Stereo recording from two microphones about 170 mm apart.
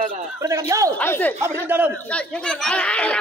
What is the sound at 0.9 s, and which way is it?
A child's voice, 10° left (ahead or behind).